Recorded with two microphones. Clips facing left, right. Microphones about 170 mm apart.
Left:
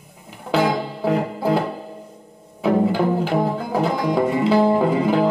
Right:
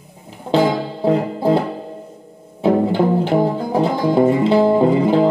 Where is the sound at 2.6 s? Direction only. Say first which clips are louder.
Right 3 dB; 25° right (ahead or behind).